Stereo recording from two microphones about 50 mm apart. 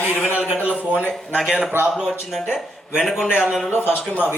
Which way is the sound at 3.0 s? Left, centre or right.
Centre.